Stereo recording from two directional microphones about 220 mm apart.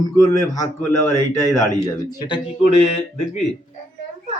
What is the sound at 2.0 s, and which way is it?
Speech, 20° left (ahead or behind).